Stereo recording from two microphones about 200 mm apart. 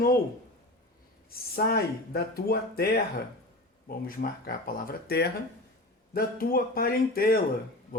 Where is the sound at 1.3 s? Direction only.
50° left (ahead or behind).